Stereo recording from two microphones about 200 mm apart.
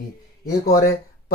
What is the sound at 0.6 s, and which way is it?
Speech, 50° left (ahead or behind).